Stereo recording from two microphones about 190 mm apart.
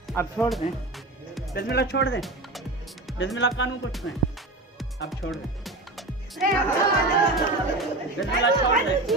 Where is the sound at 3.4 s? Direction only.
75° left (ahead or behind).